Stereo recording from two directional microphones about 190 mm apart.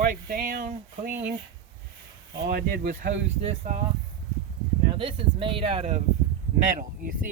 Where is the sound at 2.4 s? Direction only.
50° right (ahead or behind).